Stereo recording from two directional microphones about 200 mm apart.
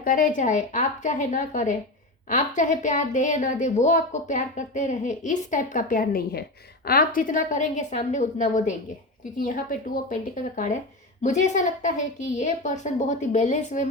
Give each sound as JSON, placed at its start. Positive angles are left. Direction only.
{"t": 0.0, "sound": "a woman's voice", "side_deg": 45}
{"t": 11.2, "sound": "a woman's voice", "side_deg": 35}